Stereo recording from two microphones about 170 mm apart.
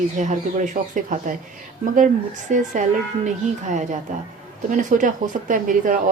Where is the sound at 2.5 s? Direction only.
45° right (ahead or behind).